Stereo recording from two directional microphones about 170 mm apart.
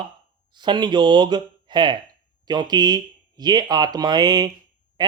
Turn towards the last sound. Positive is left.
turn(degrees=-25)  # may be behind; listen again after turning